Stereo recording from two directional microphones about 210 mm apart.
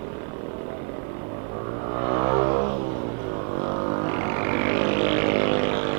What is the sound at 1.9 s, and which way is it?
Vehicle, 20° right (ahead or behind).